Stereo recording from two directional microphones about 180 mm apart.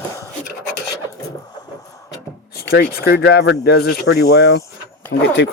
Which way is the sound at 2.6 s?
65° left (ahead or behind).